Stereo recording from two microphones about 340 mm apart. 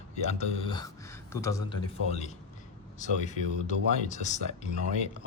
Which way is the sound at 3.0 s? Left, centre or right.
Left.